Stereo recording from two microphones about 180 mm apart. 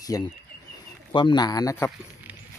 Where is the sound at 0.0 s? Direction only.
20° left (ahead or behind).